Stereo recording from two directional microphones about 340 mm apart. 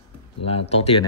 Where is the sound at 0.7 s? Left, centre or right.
Centre.